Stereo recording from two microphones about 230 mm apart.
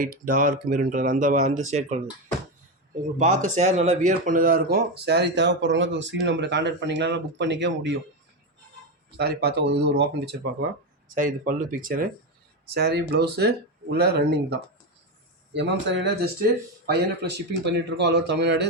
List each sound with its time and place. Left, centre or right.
0.0 s speech: right
3.2 s speech: right
9.1 s speech: right
11.1 s speech: right